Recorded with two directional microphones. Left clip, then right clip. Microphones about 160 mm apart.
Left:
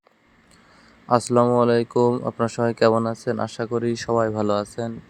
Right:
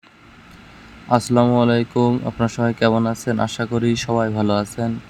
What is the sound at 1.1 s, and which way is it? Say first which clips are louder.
Speech: right 1 dB; 25° left (ahead or behind).